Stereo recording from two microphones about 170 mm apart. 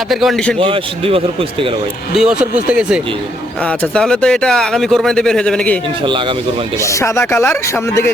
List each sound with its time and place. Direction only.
0.1 s speech: centre (ahead or behind)
0.6 s speech: 30° right (ahead or behind)
2.1 s speech: 5° right (ahead or behind)
3.7 s speech: 5° left (ahead or behind)
6.8 s speech: 15° left (ahead or behind)